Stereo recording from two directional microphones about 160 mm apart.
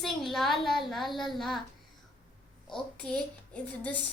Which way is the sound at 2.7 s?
5° left (ahead or behind).